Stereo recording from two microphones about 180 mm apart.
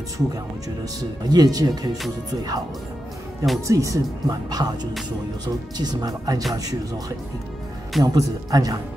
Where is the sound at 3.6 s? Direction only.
15° right (ahead or behind).